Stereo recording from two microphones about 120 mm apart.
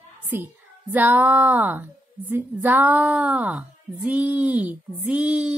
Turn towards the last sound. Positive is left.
turn(degrees=-10)  # may be behind; listen again after turning